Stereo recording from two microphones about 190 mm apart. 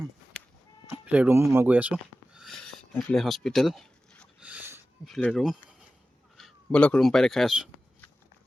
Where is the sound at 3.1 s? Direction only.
Centre (ahead or behind).